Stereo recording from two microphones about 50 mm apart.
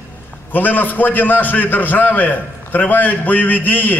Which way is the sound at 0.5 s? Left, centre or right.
Left.